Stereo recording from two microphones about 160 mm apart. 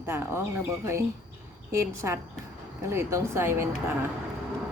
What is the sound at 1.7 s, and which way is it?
A woman's voice, 20° right (ahead or behind).